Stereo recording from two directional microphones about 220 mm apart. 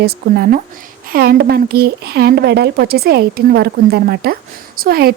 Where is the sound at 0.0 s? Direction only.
45° right (ahead or behind).